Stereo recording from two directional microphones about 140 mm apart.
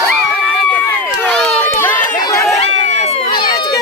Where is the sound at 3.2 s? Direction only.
30° left (ahead or behind).